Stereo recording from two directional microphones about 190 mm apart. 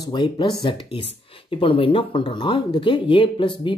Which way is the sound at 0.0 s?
25° left (ahead or behind).